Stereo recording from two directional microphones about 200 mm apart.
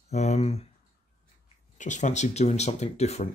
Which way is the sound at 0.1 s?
35° left (ahead or behind).